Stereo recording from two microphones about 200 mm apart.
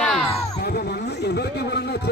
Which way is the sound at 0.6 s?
55° left (ahead or behind).